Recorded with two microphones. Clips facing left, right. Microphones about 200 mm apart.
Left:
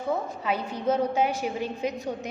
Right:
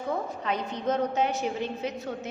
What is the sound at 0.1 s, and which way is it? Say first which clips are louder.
A woman's voice: left 2 dB; 10° left (ahead or behind).